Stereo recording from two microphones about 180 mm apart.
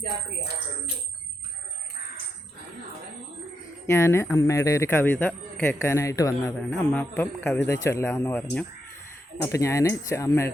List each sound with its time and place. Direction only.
3.8 s speech: 15° left (ahead or behind)